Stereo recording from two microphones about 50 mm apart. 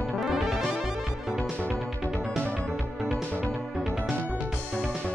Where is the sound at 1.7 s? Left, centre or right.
Centre.